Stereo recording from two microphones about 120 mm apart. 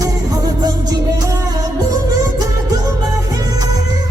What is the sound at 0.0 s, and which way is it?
Music, 35° right (ahead or behind).